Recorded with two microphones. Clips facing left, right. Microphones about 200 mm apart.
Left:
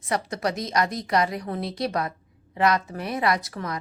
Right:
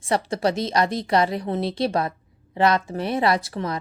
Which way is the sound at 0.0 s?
30° right (ahead or behind).